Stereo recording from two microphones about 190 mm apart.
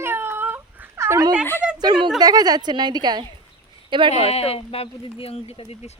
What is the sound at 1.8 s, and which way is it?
A woman's voice, 20° right (ahead or behind).